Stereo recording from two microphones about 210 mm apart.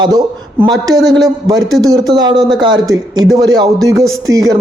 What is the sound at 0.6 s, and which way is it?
Speech, 15° right (ahead or behind).